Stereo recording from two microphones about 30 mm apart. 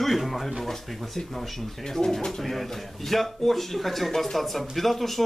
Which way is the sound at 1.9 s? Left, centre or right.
Centre.